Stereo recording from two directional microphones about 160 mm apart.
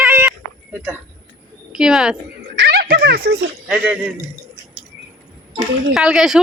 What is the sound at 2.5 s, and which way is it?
Music, 85° right.